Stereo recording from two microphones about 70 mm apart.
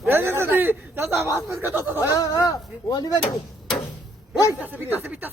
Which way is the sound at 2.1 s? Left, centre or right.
Left.